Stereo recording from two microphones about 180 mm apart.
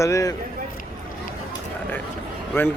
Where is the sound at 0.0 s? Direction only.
15° left (ahead or behind).